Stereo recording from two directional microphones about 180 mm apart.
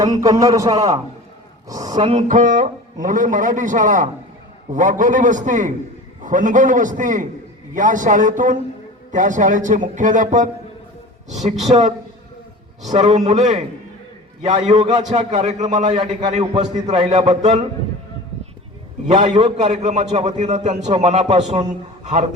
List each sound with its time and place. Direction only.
0.0 s a man's voice: 20° right (ahead or behind)
2.0 s a man's voice: 40° right (ahead or behind)
19.0 s a man's voice: 40° right (ahead or behind)